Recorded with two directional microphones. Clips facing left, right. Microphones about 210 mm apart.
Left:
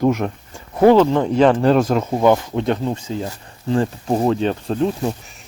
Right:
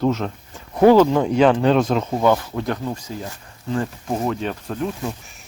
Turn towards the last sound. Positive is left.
turn(degrees=35)  # may be behind; listen again after turning